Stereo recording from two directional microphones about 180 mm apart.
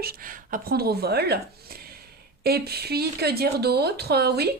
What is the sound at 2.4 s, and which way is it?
Speech, 60° right (ahead or behind).